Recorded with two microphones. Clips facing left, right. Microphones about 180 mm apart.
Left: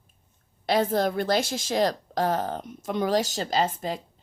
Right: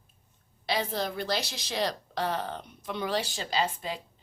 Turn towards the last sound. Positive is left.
turn(degrees=40)  # may be behind; listen again after turning